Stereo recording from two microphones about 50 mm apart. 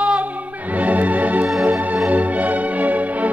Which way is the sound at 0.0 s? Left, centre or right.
Right.